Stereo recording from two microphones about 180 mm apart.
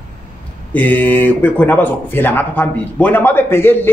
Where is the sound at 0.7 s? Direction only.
10° left (ahead or behind).